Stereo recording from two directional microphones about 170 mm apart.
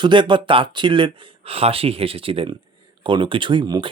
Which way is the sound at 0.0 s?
30° right (ahead or behind).